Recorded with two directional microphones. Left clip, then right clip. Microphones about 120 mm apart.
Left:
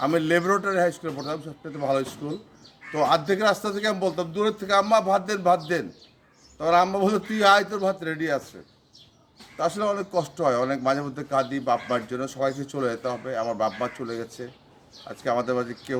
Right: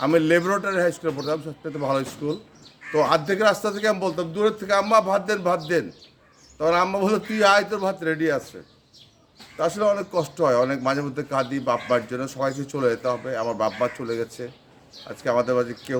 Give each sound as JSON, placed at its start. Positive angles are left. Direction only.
{"t": 0.0, "sound": "a man's voice", "side_deg": -20}
{"t": 9.6, "sound": "a man's voice", "side_deg": -20}